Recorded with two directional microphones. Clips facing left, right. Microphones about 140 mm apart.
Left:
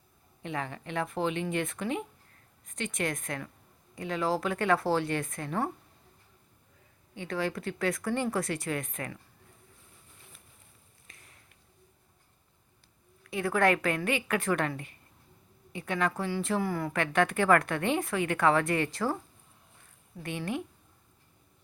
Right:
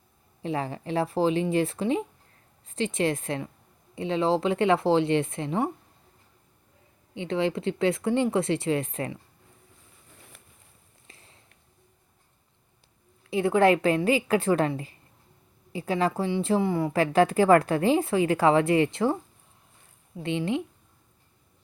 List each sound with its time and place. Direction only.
0.4 s a woman's voice: 30° right (ahead or behind)
7.1 s a woman's voice: 25° right (ahead or behind)
11.1 s a sound: 25° right (ahead or behind)
13.2 s a woman's voice: 25° right (ahead or behind)
20.2 s a woman's voice: 25° right (ahead or behind)